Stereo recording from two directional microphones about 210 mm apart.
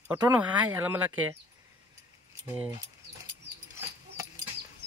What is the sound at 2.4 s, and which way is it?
Speech, 10° right (ahead or behind).